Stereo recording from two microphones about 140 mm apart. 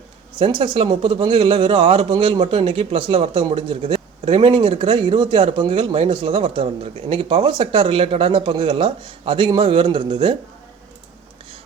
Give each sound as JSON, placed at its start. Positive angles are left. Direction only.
{"t": 0.3, "sound": "a man's voice", "side_deg": -40}